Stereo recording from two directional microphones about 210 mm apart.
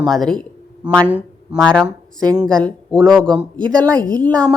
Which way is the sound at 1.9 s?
20° right (ahead or behind).